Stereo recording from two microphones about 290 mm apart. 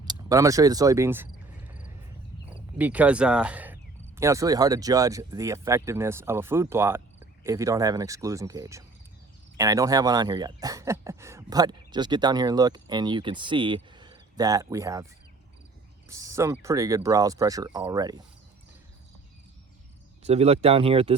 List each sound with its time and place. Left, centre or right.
0.0 s cricket: centre
2.7 s speech: centre
16.0 s speech: centre
20.2 s speech: right